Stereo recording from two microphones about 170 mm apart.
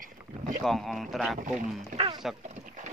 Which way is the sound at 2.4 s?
45° right (ahead or behind).